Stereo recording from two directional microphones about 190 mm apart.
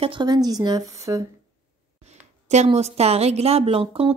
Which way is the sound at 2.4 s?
35° right (ahead or behind).